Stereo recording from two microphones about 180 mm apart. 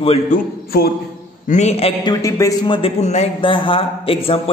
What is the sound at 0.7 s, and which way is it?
Speech, 60° left (ahead or behind).